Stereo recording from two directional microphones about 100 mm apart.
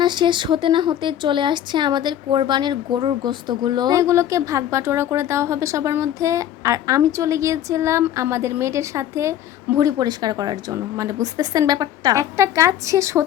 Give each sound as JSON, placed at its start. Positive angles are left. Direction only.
{"t": 0.0, "sound": "speech", "side_deg": -50}
{"t": 4.0, "sound": "a woman's voice", "side_deg": -30}